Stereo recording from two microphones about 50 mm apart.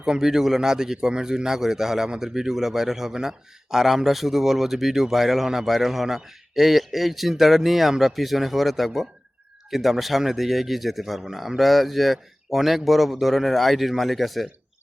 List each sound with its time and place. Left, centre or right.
0.0 s a man's voice: centre